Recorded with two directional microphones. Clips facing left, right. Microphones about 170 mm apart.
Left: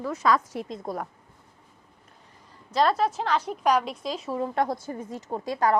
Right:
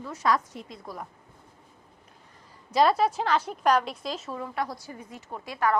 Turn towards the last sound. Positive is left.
turn(degrees=40)  # may be behind; listen again after turning